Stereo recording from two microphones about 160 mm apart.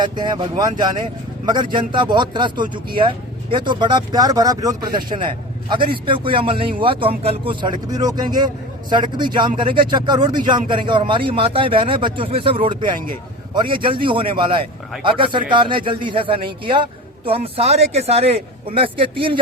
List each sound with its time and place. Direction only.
0.0 s speech: 30° right (ahead or behind)